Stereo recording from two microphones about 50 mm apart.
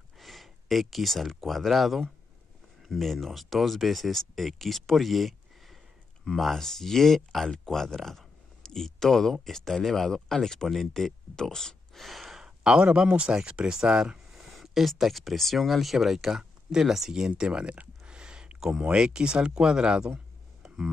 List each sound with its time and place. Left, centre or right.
0.2 s speech: centre
12.4 s speech: centre
14.3 s speech: centre
20.6 s a sound: centre